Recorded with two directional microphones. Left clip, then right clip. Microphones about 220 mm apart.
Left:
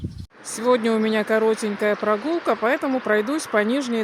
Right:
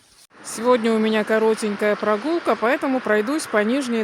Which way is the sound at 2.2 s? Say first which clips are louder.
Right 1 dB; 55° right (ahead or behind).